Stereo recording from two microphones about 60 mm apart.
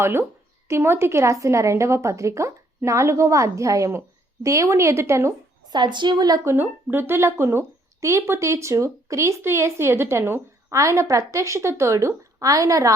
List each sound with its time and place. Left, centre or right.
0.0 s a woman's voice: right
6.5 s a woman's voice: right
9.4 s a woman's voice: right
10.7 s a woman's voice: right